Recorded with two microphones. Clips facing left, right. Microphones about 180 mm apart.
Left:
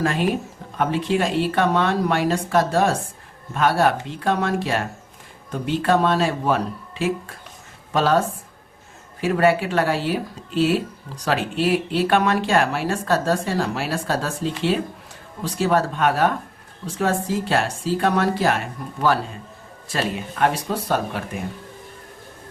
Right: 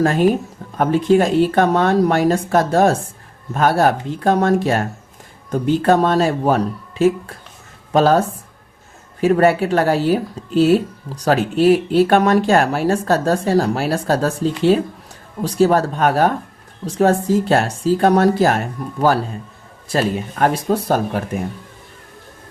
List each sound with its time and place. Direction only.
0.0 s speech: 45° right (ahead or behind)
7.9 s speech: 40° right (ahead or behind)
9.2 s speech: 40° right (ahead or behind)
20.4 s speech: 40° right (ahead or behind)